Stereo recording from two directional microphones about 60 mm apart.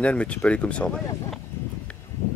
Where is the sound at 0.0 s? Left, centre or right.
Left.